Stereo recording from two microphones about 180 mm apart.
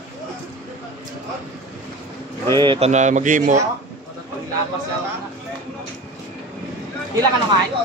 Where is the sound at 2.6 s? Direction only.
25° right (ahead or behind).